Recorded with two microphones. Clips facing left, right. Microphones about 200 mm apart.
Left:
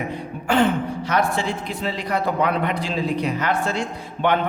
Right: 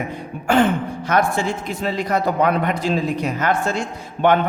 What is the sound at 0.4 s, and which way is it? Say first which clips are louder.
A woman's voice: right 2 dB; 45° right (ahead or behind).